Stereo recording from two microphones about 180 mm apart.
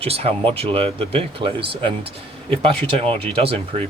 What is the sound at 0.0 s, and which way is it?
Speech, 35° right (ahead or behind).